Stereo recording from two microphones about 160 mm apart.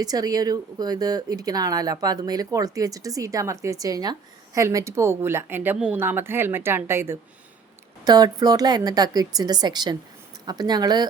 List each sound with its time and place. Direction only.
0.0 s speech: 25° right (ahead or behind)